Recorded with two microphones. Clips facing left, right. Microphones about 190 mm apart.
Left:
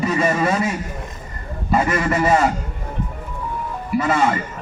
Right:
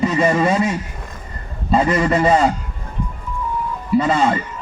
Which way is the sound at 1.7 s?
25° right (ahead or behind).